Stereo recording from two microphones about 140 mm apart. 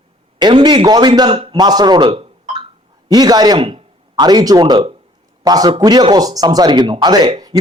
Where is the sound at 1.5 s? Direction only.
30° right (ahead or behind).